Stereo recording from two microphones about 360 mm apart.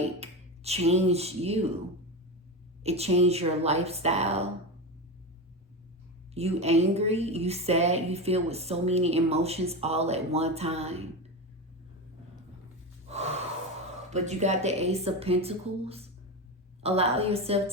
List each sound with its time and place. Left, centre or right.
0.2 s speech: centre
2.8 s a woman's voice: centre
6.3 s a woman's voice: centre
13.1 s gasp: centre
13.9 s a woman's voice: centre